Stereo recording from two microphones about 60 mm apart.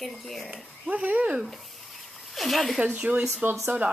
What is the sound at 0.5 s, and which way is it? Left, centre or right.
Speech, centre.